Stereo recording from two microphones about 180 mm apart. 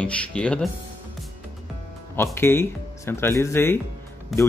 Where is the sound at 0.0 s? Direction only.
5° left (ahead or behind).